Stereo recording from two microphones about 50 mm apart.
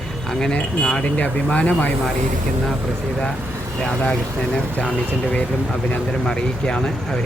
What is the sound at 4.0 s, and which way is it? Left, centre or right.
Speech, centre.